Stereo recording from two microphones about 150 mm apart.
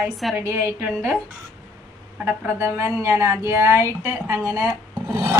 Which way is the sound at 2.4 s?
15° right (ahead or behind).